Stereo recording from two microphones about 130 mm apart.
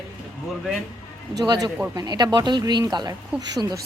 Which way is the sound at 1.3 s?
30° right (ahead or behind).